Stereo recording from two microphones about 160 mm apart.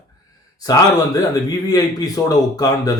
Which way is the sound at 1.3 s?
25° left (ahead or behind).